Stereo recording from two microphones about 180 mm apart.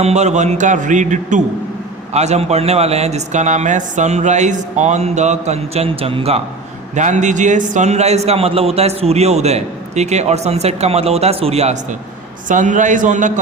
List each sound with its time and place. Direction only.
0.0 s a man's voice: 40° right (ahead or behind)